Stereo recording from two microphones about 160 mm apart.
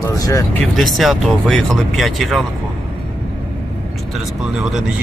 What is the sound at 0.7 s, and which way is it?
Speech, centre (ahead or behind).